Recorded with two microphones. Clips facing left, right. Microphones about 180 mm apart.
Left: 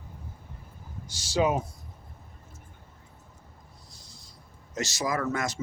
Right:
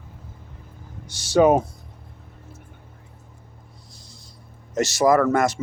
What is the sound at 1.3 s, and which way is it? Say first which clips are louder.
Speech: right 9 dB; 60° right (ahead or behind).